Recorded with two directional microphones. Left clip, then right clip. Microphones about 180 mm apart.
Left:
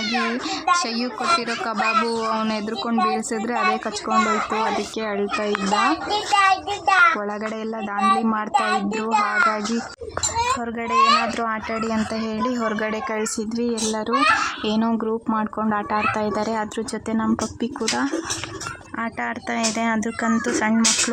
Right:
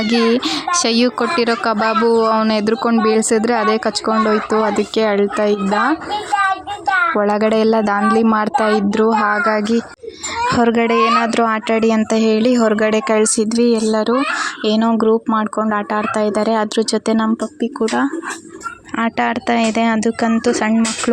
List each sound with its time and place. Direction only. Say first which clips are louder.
0.0 s speech: right 8 dB; 40° right (ahead or behind)
7.2 s a child's voice: right 13 dB; 40° right (ahead or behind); by 20.8 s 20° right (ahead or behind)